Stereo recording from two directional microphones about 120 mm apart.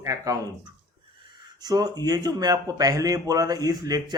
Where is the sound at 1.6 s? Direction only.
35° right (ahead or behind).